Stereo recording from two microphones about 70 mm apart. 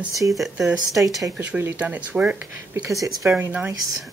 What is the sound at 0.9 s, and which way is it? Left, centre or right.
Speech, right.